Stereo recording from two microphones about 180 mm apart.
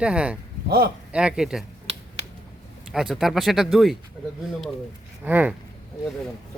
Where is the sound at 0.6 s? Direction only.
60° right (ahead or behind).